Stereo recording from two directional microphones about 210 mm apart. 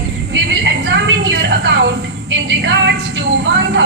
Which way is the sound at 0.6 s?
55° right (ahead or behind).